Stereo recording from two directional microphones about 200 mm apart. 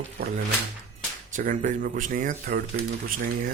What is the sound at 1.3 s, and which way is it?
Speech, 40° right (ahead or behind).